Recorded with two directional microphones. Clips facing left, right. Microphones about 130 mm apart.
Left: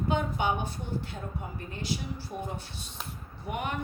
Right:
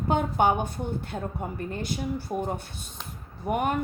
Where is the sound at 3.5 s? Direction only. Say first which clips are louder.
Right 8 dB; 45° right (ahead or behind).